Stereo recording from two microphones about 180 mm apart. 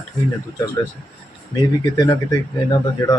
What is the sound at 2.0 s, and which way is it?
Speech, 20° left (ahead or behind).